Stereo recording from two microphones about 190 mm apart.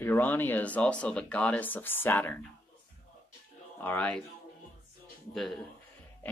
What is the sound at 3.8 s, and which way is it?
Speech, 10° left (ahead or behind).